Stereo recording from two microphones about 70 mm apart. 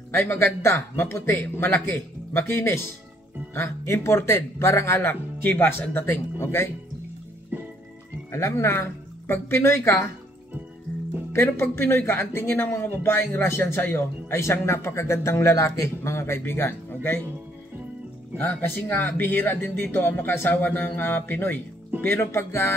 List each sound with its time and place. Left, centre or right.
0.1 s speech: left
5.0 s speech: left
7.5 s music: right
8.3 s speech: left
11.3 s speech: left
18.4 s speech: left